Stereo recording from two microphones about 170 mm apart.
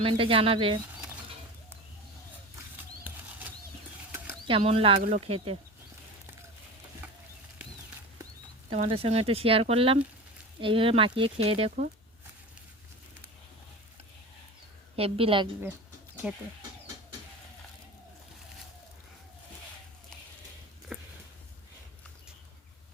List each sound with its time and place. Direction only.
0.0 s speech: 30° right (ahead or behind)
3.0 s a sound: 10° right (ahead or behind)
4.4 s speech: 35° right (ahead or behind)
8.7 s speech: 35° right (ahead or behind)
14.9 s speech: 35° right (ahead or behind)
20.9 s a sound: centre (ahead or behind)